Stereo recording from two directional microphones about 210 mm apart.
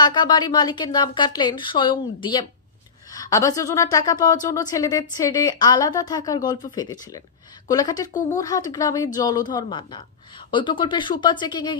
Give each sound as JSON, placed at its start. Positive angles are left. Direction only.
{"t": 0.0, "sound": "a woman's voice", "side_deg": 20}
{"t": 8.1, "sound": "speech", "side_deg": 35}
{"t": 8.4, "sound": "a woman's voice", "side_deg": 15}